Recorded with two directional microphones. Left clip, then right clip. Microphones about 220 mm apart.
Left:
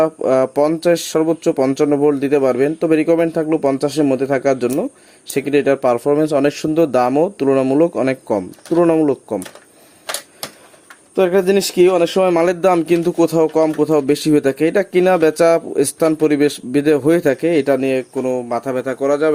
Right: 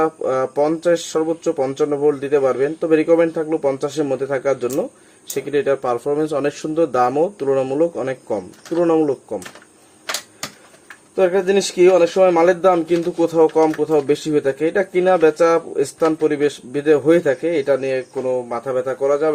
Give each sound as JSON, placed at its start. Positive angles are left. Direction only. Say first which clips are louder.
{"t": 0.0, "sound": "speech", "louder": "left 4 dB", "side_deg": 45}
{"t": 11.1, "sound": "speech", "louder": "left 2 dB", "side_deg": 50}